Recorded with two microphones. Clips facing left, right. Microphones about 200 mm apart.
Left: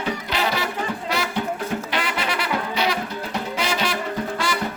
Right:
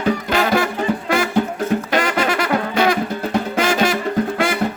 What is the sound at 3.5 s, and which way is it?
Music, 50° right (ahead or behind).